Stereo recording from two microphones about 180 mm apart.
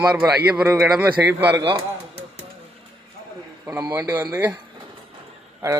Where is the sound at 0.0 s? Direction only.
10° right (ahead or behind).